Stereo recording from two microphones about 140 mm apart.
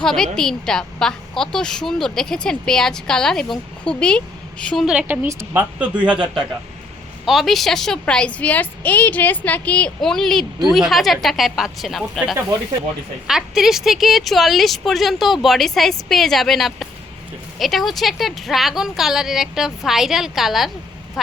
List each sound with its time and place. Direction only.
0.0 s a woman's voice: 5° left (ahead or behind)
7.3 s a woman's voice: centre (ahead or behind)